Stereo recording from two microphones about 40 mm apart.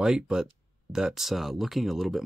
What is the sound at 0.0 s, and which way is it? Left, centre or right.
Speech, centre.